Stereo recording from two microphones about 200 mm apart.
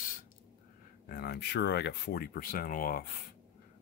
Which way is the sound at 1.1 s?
55° left (ahead or behind).